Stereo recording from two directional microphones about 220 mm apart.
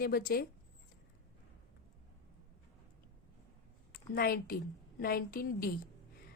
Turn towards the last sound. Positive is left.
turn(degrees=40)  # may be behind; listen again after turning